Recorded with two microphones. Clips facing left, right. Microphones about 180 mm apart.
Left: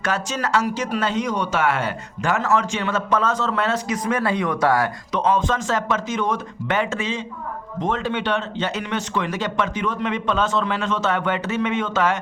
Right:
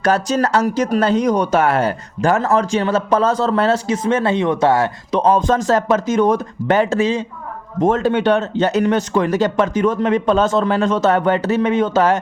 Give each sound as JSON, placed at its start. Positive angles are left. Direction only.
{"t": 0.0, "sound": "speech", "side_deg": -40}